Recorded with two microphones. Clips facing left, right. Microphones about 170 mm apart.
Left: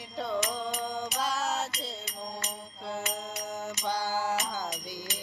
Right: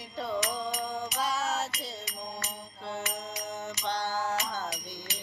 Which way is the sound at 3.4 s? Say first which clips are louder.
Left 1 dB; 5° left (ahead or behind).